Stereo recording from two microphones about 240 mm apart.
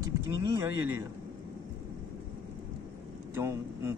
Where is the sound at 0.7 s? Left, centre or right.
Left.